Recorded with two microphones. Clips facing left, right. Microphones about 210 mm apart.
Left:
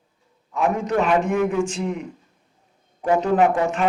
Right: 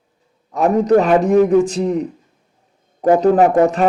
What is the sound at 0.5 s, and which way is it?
Speech, 40° right (ahead or behind).